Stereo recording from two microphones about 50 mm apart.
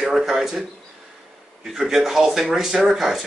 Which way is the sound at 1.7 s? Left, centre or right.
Centre.